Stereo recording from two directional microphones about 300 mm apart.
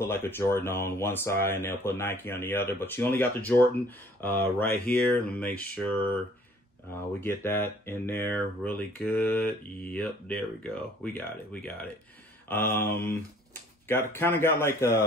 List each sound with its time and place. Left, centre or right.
0.0 s speech: centre
7.2 s speech: centre